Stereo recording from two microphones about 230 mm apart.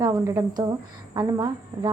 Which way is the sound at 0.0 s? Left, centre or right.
Centre.